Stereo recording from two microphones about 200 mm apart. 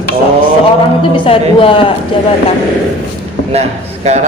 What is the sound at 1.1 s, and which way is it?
Speech, 25° left (ahead or behind).